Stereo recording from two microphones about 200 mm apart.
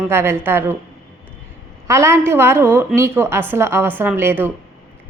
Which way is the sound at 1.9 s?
15° right (ahead or behind).